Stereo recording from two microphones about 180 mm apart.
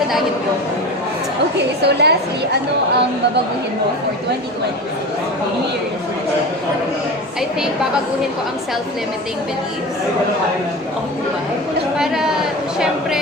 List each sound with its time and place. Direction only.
1.8 s a woman's voice: 65° right (ahead or behind)
11.9 s speech: centre (ahead or behind)